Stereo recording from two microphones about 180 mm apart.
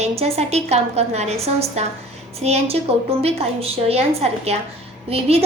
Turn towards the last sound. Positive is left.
turn(degrees=-35)  # may be behind; listen again after turning